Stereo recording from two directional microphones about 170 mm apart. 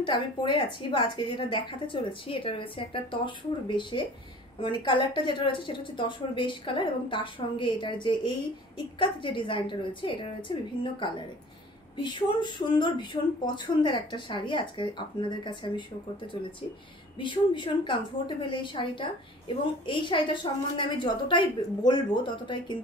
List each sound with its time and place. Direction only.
0.0 s a woman's voice: 30° left (ahead or behind)
17.2 s a woman's voice: 30° left (ahead or behind)